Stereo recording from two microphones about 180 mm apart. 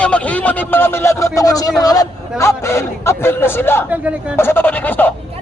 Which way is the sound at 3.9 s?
10° right (ahead or behind).